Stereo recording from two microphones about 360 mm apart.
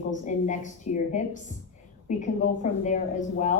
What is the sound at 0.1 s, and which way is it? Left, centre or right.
A woman's voice, left.